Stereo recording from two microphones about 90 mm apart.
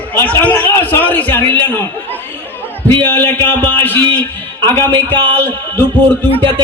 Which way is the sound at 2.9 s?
25° left (ahead or behind).